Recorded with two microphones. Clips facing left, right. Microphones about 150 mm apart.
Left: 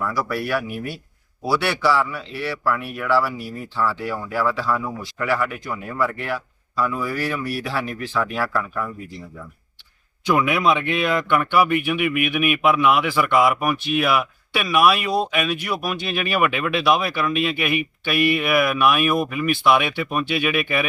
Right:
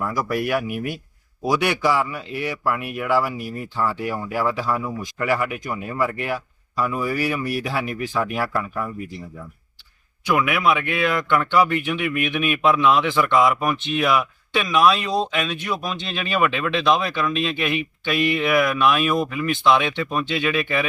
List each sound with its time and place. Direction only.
0.0 s speech: 15° right (ahead or behind)
10.2 s a man's voice: 20° left (ahead or behind)